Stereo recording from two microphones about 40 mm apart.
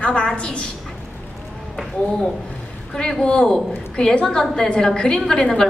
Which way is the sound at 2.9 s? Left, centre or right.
Centre.